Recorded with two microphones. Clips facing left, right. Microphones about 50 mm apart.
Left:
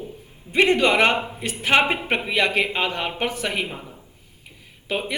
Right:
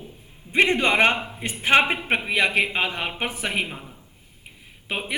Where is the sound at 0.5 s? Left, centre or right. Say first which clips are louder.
Left 2 dB; right.